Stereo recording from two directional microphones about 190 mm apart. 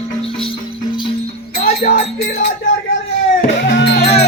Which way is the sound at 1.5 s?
50° left (ahead or behind).